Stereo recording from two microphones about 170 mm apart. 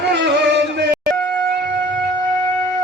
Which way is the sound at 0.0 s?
80° right.